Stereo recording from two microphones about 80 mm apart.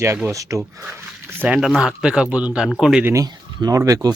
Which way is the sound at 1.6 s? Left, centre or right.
Centre.